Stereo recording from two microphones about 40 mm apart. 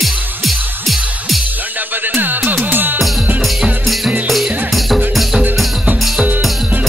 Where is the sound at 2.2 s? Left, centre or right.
Right.